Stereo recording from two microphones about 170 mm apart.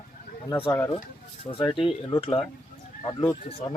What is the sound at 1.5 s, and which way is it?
Speech, 30° left (ahead or behind).